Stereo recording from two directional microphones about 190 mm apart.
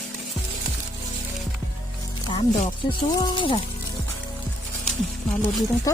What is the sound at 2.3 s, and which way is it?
Speech, 25° left (ahead or behind).